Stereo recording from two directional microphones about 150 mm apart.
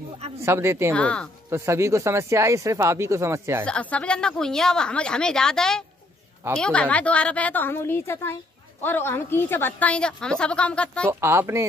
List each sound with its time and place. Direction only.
0.4 s speech: 15° right (ahead or behind)
0.9 s a woman's voice: 5° left (ahead or behind)
1.5 s speech: 20° right (ahead or behind)
3.6 s a woman's voice: 5° left (ahead or behind)
11.1 s speech: 15° right (ahead or behind)